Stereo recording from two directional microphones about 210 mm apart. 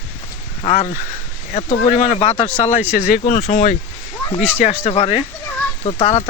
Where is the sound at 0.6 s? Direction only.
30° left (ahead or behind).